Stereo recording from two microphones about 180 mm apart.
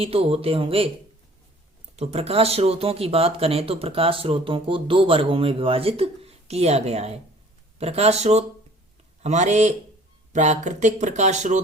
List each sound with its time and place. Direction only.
0.0 s speech: 30° right (ahead or behind)
2.0 s speech: 35° right (ahead or behind)